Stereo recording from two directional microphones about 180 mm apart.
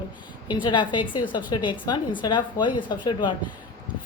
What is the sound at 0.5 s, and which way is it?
A woman's voice, 25° left (ahead or behind).